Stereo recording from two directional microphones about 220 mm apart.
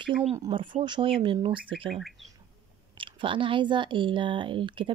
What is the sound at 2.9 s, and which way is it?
Speech, 25° right (ahead or behind).